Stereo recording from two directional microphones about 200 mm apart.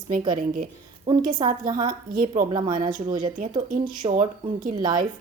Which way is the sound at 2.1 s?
45° right (ahead or behind).